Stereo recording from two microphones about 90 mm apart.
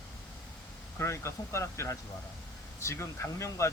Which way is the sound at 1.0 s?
30° left (ahead or behind).